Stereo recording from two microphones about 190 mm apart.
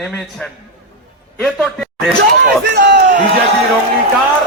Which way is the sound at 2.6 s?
55° right (ahead or behind).